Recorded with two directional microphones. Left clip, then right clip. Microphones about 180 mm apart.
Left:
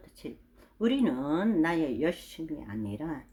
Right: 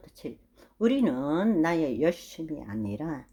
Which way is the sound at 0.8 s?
30° right (ahead or behind).